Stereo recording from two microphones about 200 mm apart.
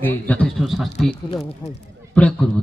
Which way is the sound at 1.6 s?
30° left (ahead or behind).